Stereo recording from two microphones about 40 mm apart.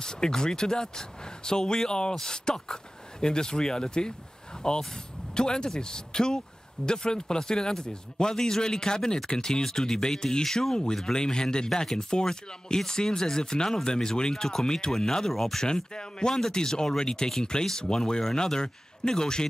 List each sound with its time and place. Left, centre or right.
0.0 s speech: centre
15.6 s speech: centre